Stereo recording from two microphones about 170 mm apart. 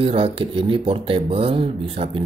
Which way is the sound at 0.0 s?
35° right (ahead or behind).